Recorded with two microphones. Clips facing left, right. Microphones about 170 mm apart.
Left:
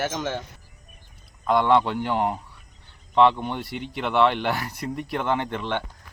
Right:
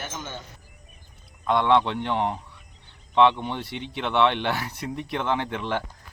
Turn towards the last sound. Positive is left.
turn(degrees=0)  # may be behind; listen again after turning